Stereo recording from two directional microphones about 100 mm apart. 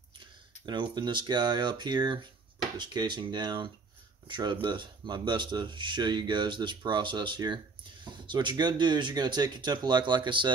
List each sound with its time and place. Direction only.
0.7 s speech: 45° right (ahead or behind)